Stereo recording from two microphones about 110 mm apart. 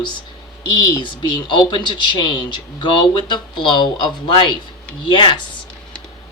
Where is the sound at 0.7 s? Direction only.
45° left (ahead or behind).